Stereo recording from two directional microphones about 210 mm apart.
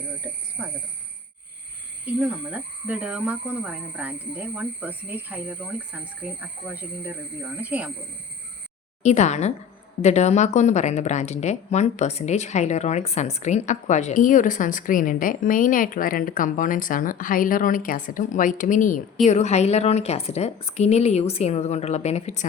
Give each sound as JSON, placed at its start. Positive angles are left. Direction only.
{"t": 0.6, "sound": "speech", "side_deg": -5}
{"t": 2.1, "sound": "speech", "side_deg": -5}
{"t": 7.6, "sound": "speech", "side_deg": -5}
{"t": 9.0, "sound": "a woman's voice", "side_deg": 35}